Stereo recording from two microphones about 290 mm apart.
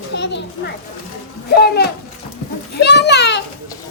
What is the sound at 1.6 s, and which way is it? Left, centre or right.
Speech, left.